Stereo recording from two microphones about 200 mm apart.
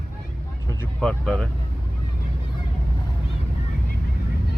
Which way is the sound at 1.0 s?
5° left (ahead or behind).